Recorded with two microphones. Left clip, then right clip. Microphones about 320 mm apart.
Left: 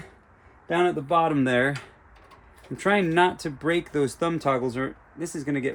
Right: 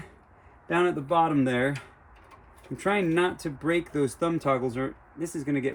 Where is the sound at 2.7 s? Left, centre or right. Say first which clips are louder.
Left 4 dB; centre.